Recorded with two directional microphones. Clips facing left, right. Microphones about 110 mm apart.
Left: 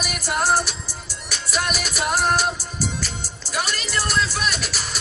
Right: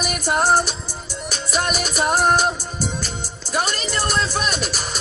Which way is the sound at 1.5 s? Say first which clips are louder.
Right 3 dB; 25° right (ahead or behind).